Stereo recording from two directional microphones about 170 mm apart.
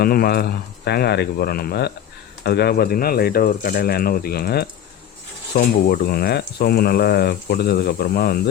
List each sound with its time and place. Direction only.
0.0 s speech: 60° left (ahead or behind)